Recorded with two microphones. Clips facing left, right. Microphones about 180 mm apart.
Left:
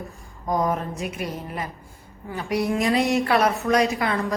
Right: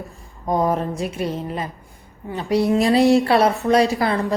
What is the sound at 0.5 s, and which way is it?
A woman's voice, 30° right (ahead or behind).